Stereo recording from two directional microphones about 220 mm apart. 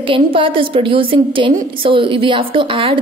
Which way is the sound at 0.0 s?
25° right (ahead or behind).